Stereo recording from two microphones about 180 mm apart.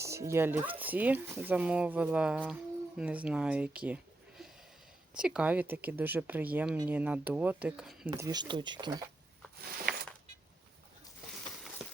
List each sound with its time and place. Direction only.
0.0 s speech: 15° right (ahead or behind)
8.2 s speech: 20° right (ahead or behind)
9.9 s a sound: 55° right (ahead or behind)